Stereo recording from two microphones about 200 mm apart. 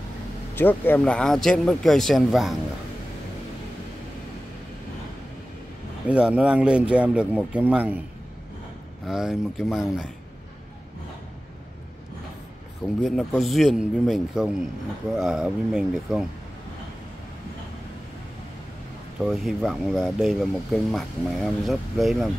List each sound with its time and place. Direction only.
0.6 s speech: 10° left (ahead or behind)
6.0 s speech: 5° right (ahead or behind)
9.0 s speech: centre (ahead or behind)
13.0 s speech: centre (ahead or behind)
19.1 s speech: centre (ahead or behind)